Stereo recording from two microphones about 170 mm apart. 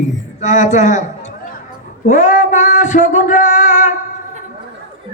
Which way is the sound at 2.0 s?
45° left (ahead or behind).